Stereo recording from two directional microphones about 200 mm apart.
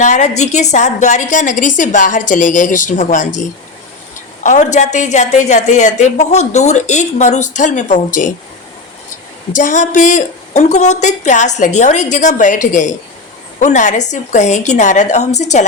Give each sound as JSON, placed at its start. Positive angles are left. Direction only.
{"t": 0.0, "sound": "a woman's voice", "side_deg": 35}
{"t": 4.4, "sound": "a woman's voice", "side_deg": 35}
{"t": 9.6, "sound": "a woman's voice", "side_deg": 40}